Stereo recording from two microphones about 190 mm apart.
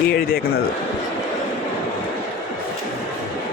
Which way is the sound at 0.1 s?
55° left (ahead or behind).